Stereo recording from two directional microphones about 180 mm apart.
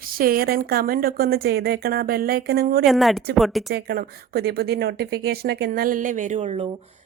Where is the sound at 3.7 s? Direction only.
60° right (ahead or behind); by 6.7 s 35° right (ahead or behind).